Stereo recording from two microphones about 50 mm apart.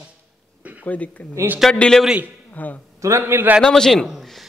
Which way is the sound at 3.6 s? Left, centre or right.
Centre.